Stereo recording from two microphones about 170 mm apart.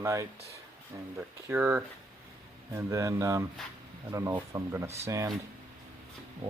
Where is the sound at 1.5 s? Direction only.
15° right (ahead or behind).